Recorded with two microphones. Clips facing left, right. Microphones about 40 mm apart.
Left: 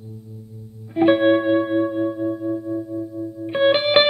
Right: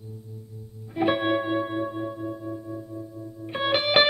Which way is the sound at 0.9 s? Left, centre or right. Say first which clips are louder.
Left 8 dB; centre.